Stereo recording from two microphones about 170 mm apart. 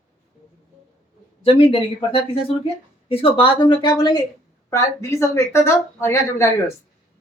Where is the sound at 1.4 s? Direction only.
35° left (ahead or behind).